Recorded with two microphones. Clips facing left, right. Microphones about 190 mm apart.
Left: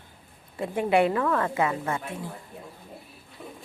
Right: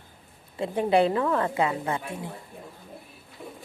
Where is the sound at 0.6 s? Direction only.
30° right (ahead or behind).